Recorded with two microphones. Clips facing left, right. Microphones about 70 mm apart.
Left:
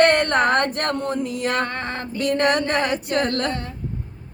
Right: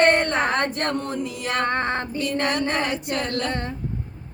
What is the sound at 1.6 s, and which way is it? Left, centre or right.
Female singing, right.